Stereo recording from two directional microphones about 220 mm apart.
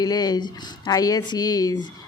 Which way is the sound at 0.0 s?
20° left (ahead or behind).